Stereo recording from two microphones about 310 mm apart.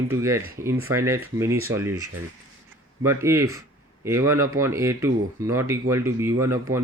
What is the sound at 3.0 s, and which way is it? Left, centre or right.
Speech, centre.